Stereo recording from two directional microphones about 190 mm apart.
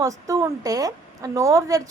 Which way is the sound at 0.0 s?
15° right (ahead or behind).